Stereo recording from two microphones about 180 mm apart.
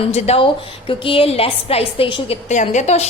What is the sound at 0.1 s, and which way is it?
A woman's voice, 35° left (ahead or behind).